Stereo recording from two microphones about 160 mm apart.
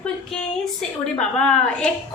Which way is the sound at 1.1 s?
5° left (ahead or behind).